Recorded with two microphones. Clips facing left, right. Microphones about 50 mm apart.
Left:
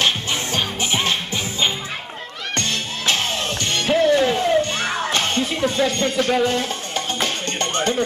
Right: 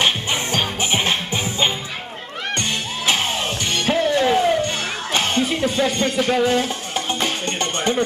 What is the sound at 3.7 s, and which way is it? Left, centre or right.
Music, centre.